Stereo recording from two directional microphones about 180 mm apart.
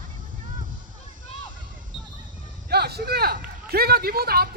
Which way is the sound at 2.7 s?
60° right (ahead or behind).